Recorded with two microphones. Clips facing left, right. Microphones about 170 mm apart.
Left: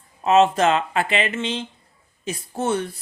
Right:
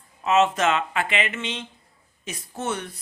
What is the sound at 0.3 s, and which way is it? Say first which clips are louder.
Speech: left 4 dB; 35° left (ahead or behind).